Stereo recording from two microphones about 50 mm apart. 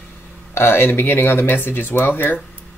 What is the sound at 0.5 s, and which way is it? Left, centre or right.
Speech, left.